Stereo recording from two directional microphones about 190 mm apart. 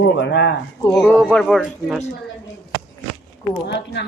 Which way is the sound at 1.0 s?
10° left (ahead or behind).